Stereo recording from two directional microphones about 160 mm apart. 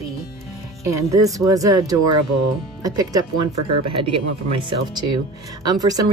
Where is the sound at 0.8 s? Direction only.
20° right (ahead or behind).